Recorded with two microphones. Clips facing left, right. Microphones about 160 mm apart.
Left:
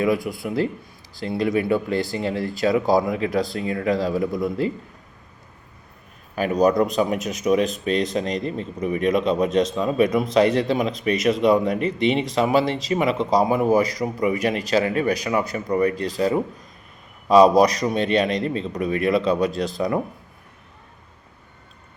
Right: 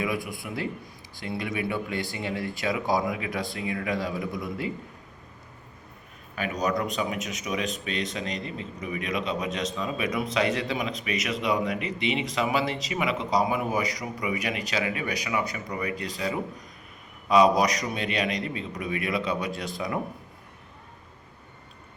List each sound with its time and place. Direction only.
0.0 s speech: 30° left (ahead or behind)
6.6 s a man's voice: 35° left (ahead or behind)